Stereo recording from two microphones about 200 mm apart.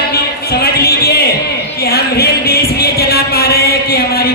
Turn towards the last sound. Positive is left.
turn(degrees=50)  # may be behind; listen again after turning